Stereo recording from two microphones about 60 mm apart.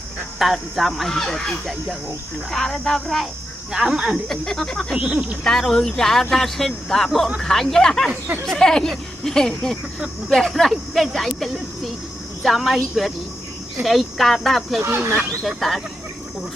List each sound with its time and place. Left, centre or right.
0.3 s speech: centre
3.7 s speech: centre
4.3 s speech: centre
4.9 s speech: right
5.5 s speech: centre
12.4 s speech: centre
14.8 s speech: right
15.4 s speech: centre